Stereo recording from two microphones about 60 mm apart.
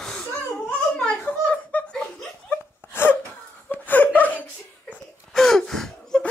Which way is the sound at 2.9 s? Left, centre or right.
Left.